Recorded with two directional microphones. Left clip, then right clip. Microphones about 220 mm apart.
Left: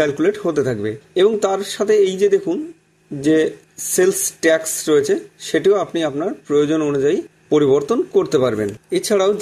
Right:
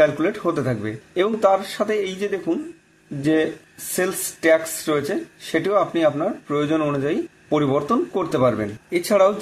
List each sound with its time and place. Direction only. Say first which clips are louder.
0.0 s speech: left 1 dB; 35° left (ahead or behind)